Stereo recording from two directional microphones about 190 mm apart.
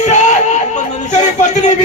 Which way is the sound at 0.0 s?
40° left (ahead or behind).